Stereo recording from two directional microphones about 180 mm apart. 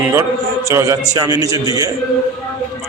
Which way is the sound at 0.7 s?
20° right (ahead or behind).